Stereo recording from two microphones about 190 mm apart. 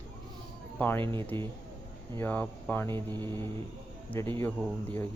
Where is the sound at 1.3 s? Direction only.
25° right (ahead or behind).